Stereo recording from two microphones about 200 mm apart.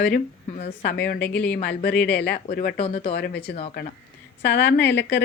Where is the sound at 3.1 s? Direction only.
55° left (ahead or behind).